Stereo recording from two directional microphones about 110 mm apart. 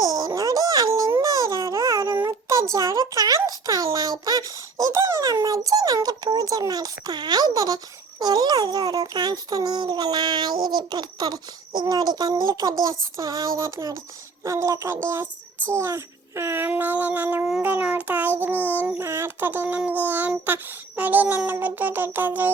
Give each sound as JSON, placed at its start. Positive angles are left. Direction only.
{"t": 0.0, "sound": "a sound", "side_deg": -35}
{"t": 8.2, "sound": "a child's voice", "side_deg": -35}
{"t": 15.7, "sound": "child singing", "side_deg": -25}